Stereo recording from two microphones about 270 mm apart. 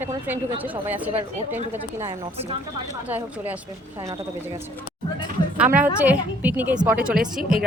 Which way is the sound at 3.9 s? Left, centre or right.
Centre.